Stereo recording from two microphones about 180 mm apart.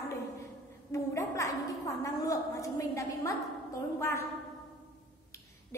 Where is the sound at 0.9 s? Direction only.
15° left (ahead or behind).